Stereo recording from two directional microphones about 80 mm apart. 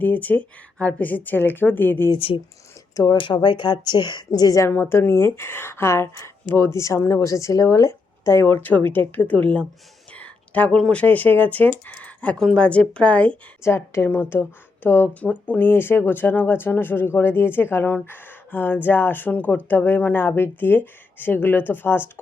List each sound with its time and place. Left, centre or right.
0.0 s speech: left
3.2 s speech: left
4.4 s a woman's voice: left
4.7 s speech: left
10.1 s a sound: centre
11.0 s speech: centre
11.9 s a sound: centre
12.4 s speech: centre
13.6 s speech: left